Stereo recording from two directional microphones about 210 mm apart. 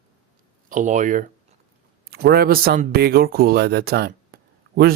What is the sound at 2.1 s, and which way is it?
Speech, 50° right (ahead or behind).